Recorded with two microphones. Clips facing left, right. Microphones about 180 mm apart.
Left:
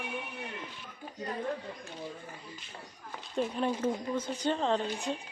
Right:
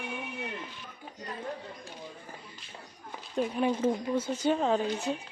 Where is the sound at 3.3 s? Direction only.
5° right (ahead or behind).